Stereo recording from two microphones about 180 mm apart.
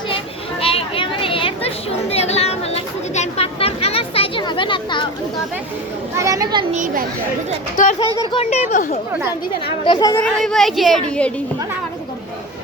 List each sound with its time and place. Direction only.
0.6 s a sound: 30° left (ahead or behind)
6.1 s a child's voice: 20° right (ahead or behind)
6.7 s a child's voice: 45° right (ahead or behind)
7.9 s speech: 30° left (ahead or behind)
9.8 s a child's voice: 25° left (ahead or behind)
10.2 s speech: 5° left (ahead or behind)